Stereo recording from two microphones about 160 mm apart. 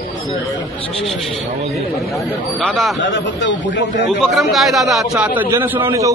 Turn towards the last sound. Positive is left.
turn(degrees=-15)  # may be behind; listen again after turning